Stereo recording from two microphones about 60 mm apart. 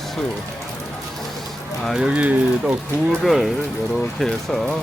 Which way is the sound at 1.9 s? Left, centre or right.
Centre.